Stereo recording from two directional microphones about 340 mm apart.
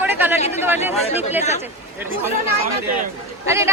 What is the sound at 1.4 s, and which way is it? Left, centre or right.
Speech, centre.